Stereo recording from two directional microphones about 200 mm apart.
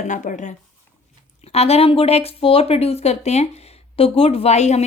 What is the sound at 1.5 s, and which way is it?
Speech, 30° left (ahead or behind).